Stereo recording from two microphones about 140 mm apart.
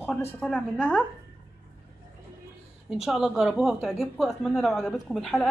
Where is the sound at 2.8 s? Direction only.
5° right (ahead or behind).